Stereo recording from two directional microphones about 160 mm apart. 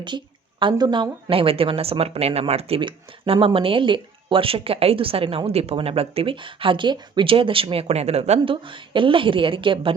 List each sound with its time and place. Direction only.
0.6 s speech: 30° right (ahead or behind)